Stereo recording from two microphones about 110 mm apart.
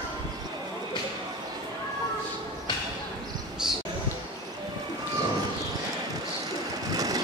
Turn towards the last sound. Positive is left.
turn(degrees=-35)  # may be behind; listen again after turning